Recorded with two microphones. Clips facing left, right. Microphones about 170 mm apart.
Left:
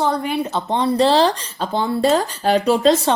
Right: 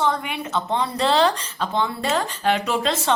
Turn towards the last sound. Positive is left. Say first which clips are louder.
# left 7 dB
turn(degrees=35)  # may be behind; listen again after turning